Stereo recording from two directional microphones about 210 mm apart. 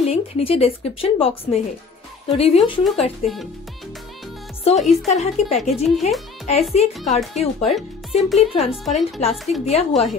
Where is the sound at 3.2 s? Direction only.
Centre (ahead or behind).